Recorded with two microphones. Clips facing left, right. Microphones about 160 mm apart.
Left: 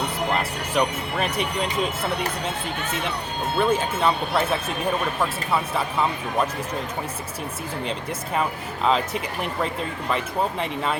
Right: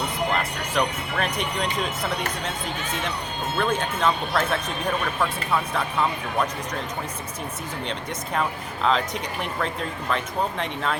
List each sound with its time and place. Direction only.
0.8 s speech: 5° left (ahead or behind)
3.6 s speech: 5° left (ahead or behind)
8.4 s speech: 5° left (ahead or behind)